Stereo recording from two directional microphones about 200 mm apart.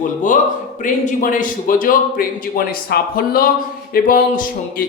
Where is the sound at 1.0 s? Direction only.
40° left (ahead or behind).